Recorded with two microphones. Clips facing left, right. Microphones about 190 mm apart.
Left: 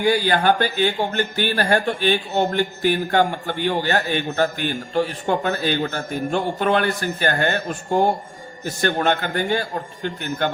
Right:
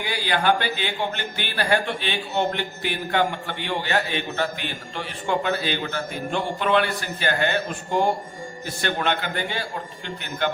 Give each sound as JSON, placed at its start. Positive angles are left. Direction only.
{"t": 0.0, "sound": "speech", "side_deg": 45}
{"t": 8.8, "sound": "speech", "side_deg": 45}